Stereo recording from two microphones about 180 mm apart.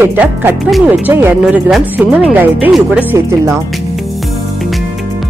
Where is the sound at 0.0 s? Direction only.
10° right (ahead or behind).